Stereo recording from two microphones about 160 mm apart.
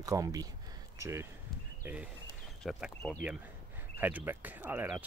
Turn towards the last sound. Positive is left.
turn(degrees=-10)  # may be behind; listen again after turning